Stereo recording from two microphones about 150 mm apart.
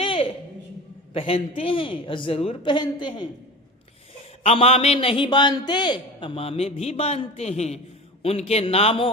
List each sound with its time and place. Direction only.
0.0 s a sound: 35° left (ahead or behind)
1.1 s a man's voice: 40° left (ahead or behind)
4.4 s a man's voice: 45° left (ahead or behind)